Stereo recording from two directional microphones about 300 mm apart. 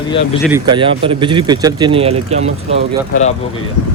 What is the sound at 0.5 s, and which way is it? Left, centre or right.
Speech, centre.